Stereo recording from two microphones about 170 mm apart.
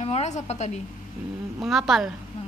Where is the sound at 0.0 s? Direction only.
40° left (ahead or behind).